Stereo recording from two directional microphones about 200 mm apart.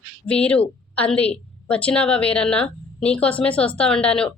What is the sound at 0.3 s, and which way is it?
A woman's voice, 5° left (ahead or behind).